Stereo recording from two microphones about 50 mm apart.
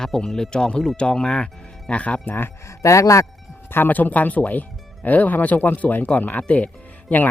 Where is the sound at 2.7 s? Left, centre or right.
Left.